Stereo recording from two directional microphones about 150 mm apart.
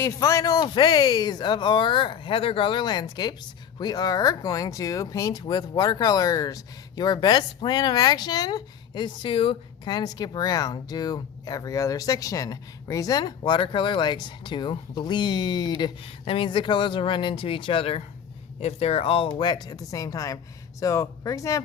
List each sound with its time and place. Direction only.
0.0 s speech: 20° left (ahead or behind)